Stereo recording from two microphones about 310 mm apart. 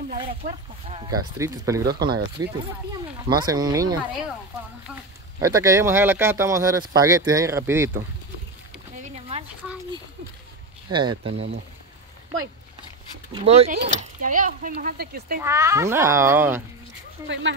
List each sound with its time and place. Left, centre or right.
0.8 s speech: centre
5.4 s speech: centre
8.9 s a sound: right
10.9 s speech: centre
13.3 s speech: centre
15.4 s speech: centre
17.3 s speech: right